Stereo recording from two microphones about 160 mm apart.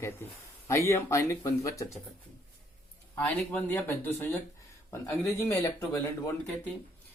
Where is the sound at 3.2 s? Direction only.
10° left (ahead or behind).